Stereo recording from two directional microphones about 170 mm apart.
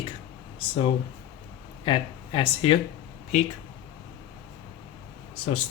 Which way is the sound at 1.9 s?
30° left (ahead or behind).